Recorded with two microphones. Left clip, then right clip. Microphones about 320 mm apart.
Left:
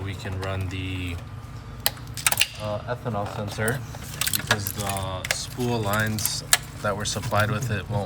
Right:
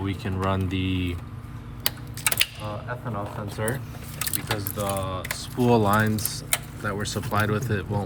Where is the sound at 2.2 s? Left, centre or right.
Centre.